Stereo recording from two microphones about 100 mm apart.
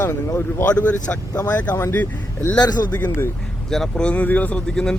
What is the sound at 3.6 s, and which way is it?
Speech, 5° left (ahead or behind).